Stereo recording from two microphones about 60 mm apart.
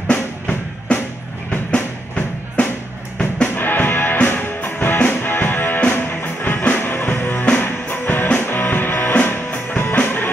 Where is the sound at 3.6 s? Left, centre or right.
Left.